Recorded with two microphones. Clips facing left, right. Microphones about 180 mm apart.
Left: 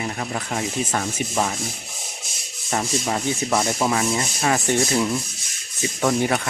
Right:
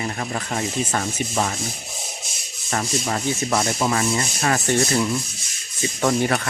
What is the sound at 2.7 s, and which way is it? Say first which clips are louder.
Rub: left 1 dB; 5° left (ahead or behind).